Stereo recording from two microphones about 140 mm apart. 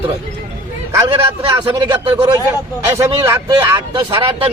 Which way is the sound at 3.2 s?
20° right (ahead or behind).